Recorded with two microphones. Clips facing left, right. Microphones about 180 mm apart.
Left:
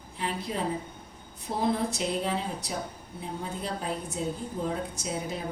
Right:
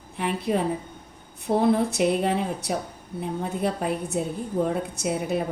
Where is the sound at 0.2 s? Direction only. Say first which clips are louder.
Right 7 dB; 60° right (ahead or behind).